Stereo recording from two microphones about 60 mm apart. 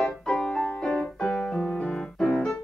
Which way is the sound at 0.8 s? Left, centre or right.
Centre.